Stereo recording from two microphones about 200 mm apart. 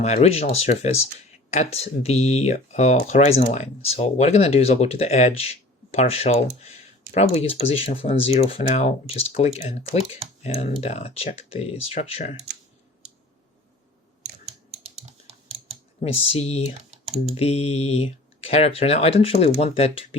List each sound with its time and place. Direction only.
0.0 s speech: 35° left (ahead or behind)
14.8 s typing: 30° right (ahead or behind)
16.0 s speech: 30° left (ahead or behind)